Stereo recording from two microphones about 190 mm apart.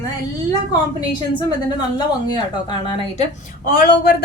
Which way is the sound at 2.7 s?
25° left (ahead or behind).